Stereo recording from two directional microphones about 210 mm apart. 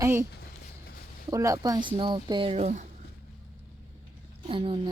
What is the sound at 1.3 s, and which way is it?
Speech, 15° right (ahead or behind).